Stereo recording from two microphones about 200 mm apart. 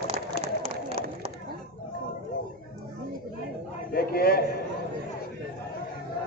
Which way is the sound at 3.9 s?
50° left (ahead or behind).